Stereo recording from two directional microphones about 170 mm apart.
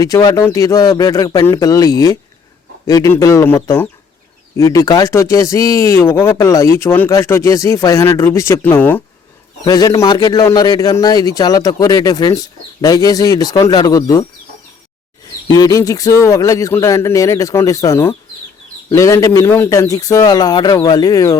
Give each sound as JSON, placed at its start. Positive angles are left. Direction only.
{"t": 0.0, "sound": "a man's voice", "side_deg": 20}
{"t": 9.6, "sound": "a man's voice", "side_deg": 20}
{"t": 15.5, "sound": "a man's voice", "side_deg": 20}